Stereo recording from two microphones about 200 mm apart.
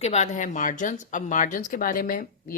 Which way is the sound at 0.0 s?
35° left (ahead or behind).